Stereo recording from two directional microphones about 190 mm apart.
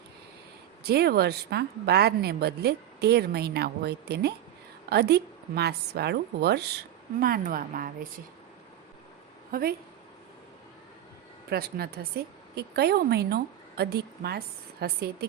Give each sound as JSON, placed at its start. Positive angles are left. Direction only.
{"t": 0.9, "sound": "a woman's voice", "side_deg": -55}
{"t": 9.5, "sound": "a woman's voice", "side_deg": -50}
{"t": 11.4, "sound": "a woman's voice", "side_deg": -55}